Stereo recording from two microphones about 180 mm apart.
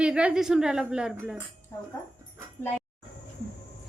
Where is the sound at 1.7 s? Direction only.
15° left (ahead or behind).